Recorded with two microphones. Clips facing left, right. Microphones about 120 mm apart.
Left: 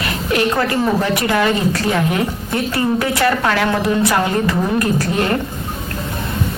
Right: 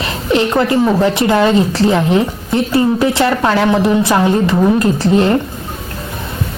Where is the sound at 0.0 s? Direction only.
25° right (ahead or behind).